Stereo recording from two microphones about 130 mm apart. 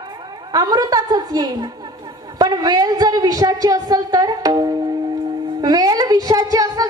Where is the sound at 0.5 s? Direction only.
30° right (ahead or behind).